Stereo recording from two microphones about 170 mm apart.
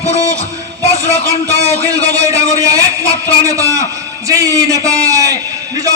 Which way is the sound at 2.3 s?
20° right (ahead or behind).